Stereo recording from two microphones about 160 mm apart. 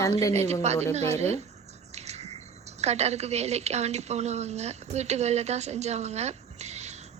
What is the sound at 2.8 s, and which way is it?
Speech, 45° right (ahead or behind).